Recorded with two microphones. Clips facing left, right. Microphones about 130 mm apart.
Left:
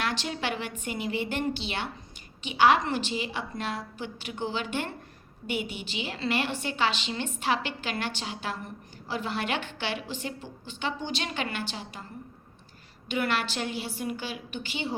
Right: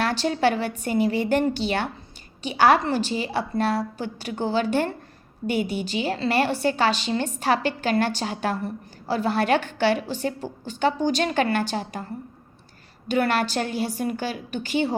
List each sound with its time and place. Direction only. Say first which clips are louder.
0.0 s a woman's voice: right 9 dB; 35° right (ahead or behind)
13.1 s a woman's voice: right 6 dB; 40° right (ahead or behind)